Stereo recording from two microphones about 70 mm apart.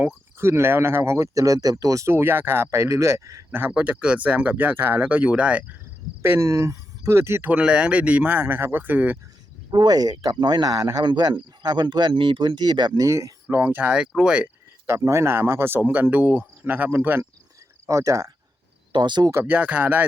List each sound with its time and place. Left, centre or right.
0.3 s speech: right
2.0 s speech: right
3.7 s speech: centre
6.4 s speech: right
7.1 s speech: right
7.5 s speech: centre
9.7 s speech: right
13.0 s cricket: right
13.5 s speech: right
14.8 s speech: right
17.8 s cricket: right
18.9 s speech: right
19.5 s speech: right